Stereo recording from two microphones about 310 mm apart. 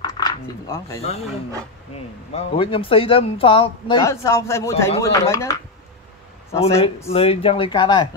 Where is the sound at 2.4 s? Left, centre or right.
Centre.